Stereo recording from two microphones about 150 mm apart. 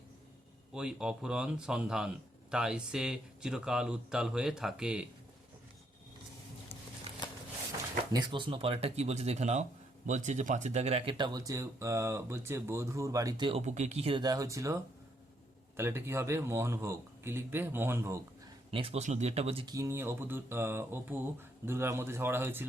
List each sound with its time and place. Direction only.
0.7 s speech: 5° right (ahead or behind)
8.1 s speech: 30° right (ahead or behind)
11.1 s speech: 30° right (ahead or behind)
13.6 s speech: 50° right (ahead or behind)
14.2 s speech: 25° right (ahead or behind)
15.8 s speech: 15° right (ahead or behind)
18.7 s speech: 40° right (ahead or behind)
19.6 s speech: 20° right (ahead or behind)